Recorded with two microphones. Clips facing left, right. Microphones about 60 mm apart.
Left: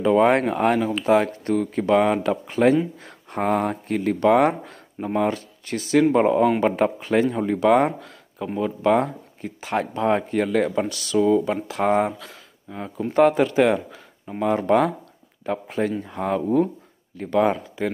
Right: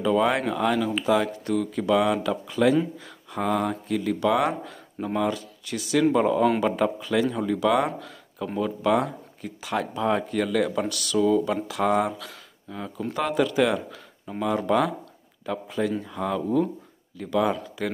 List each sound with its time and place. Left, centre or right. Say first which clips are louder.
0.0 s speech: left 5 dB; left
5.3 s speech: left 3 dB; left